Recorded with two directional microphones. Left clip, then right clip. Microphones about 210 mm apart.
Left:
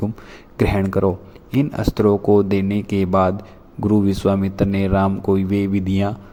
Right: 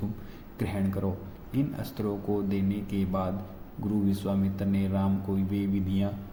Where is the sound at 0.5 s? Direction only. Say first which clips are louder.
Left 14 dB; 45° left (ahead or behind).